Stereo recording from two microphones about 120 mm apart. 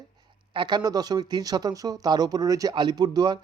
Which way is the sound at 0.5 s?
40° right (ahead or behind).